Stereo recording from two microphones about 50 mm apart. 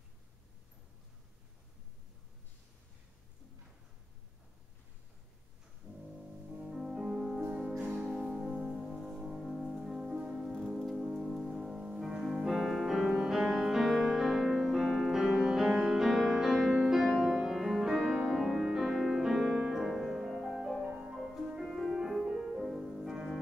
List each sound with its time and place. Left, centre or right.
6.6 s music: centre
8.7 s music: centre
19.9 s music: centre
20.8 s music: centre